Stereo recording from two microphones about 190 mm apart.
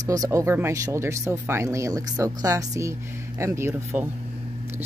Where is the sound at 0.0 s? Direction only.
20° right (ahead or behind).